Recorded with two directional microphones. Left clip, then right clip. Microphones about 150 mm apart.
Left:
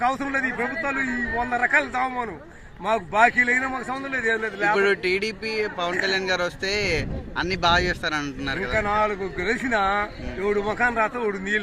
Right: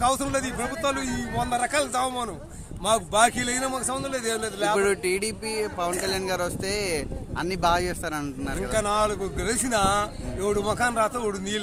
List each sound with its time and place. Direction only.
0.0 s a man's voice: 20° right (ahead or behind)
1.5 s a man's voice: 20° right (ahead or behind)
10.4 s a man's voice: 25° right (ahead or behind)